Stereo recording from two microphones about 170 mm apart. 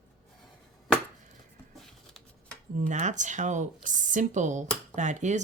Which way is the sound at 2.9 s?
45° right (ahead or behind).